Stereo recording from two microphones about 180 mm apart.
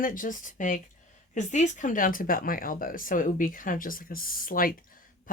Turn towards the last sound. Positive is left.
turn(degrees=50)  # may be behind; listen again after turning